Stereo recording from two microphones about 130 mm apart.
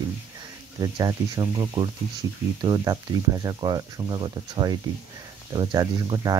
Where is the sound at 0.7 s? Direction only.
30° right (ahead or behind).